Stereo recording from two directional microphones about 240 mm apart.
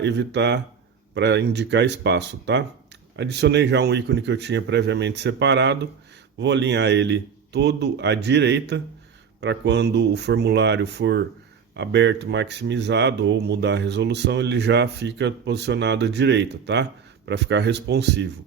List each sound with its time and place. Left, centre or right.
0.0 s speech: right